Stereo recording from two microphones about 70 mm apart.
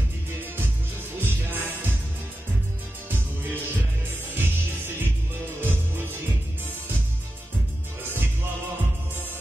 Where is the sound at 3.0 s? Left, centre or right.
Right.